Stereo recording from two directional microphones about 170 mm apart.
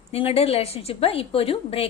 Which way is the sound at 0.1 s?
35° left (ahead or behind).